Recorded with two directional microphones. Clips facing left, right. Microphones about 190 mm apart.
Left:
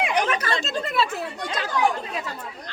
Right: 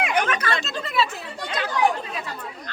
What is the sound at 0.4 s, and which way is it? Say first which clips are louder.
Speech: left 1 dB; 45° left (ahead or behind).